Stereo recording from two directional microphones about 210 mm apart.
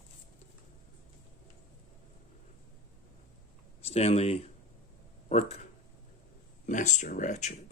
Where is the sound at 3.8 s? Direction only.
30° left (ahead or behind).